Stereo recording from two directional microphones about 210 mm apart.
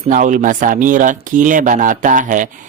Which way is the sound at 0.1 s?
40° right (ahead or behind).